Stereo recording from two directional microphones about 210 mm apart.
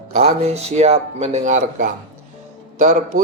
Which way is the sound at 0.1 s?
30° right (ahead or behind).